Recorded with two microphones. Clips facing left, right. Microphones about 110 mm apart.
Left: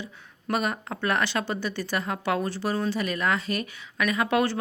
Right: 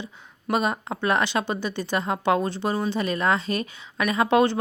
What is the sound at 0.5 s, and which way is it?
Speech, 20° right (ahead or behind).